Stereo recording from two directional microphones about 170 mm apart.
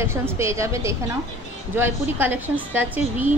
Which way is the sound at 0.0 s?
15° right (ahead or behind).